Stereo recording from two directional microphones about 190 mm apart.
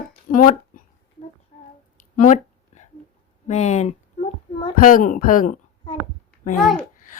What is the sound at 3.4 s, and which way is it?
Speech, 35° left (ahead or behind).